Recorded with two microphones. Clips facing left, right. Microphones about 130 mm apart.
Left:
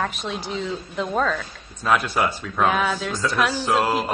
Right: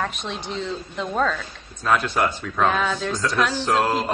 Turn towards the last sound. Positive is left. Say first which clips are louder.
# even
turn(degrees=5)  # may be behind; listen again after turning